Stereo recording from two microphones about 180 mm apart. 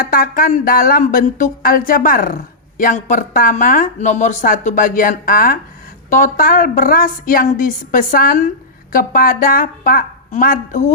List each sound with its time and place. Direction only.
0.1 s speech: 50° left (ahead or behind)